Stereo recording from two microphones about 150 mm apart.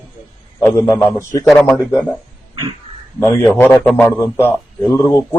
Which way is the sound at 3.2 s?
20° left (ahead or behind).